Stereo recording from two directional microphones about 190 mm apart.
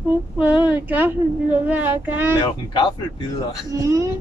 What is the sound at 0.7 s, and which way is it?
Speech, 10° right (ahead or behind).